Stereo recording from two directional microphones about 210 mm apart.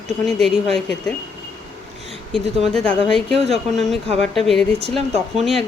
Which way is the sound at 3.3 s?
30° right (ahead or behind).